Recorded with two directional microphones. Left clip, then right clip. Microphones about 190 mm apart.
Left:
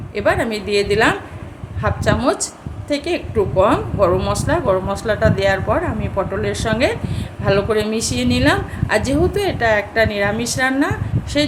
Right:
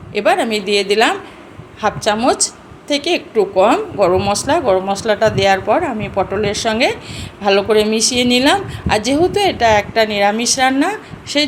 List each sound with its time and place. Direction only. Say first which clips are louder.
0.1 s speech: right 3 dB; 15° right (ahead or behind)